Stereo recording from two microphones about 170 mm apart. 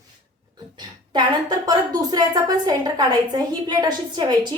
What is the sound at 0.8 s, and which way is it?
A woman's voice, 25° right (ahead or behind).